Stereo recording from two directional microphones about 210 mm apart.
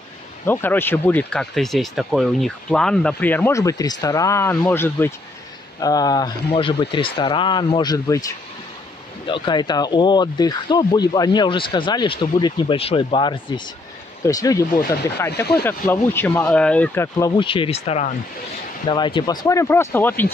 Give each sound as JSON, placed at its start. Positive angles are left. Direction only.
{"t": 0.5, "sound": "speech", "side_deg": 10}
{"t": 9.3, "sound": "speech", "side_deg": 20}
{"t": 17.4, "sound": "speech", "side_deg": 25}